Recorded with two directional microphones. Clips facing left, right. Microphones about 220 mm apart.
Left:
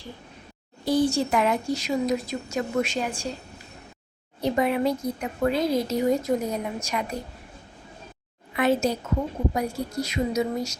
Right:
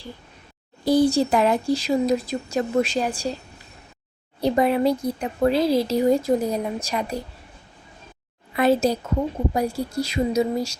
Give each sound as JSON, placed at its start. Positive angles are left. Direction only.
{"t": 0.9, "sound": "speech", "side_deg": -35}
{"t": 4.4, "sound": "speech", "side_deg": -35}
{"t": 8.5, "sound": "speech", "side_deg": -35}